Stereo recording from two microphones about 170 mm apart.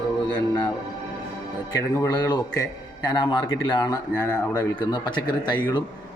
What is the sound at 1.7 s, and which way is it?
Speech, 25° left (ahead or behind).